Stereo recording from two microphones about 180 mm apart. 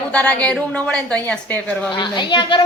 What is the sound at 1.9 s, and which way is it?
Speech, 25° left (ahead or behind).